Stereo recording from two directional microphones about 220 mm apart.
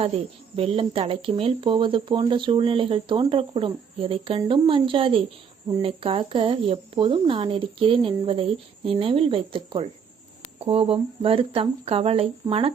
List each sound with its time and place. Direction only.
0.5 s speech: 25° right (ahead or behind)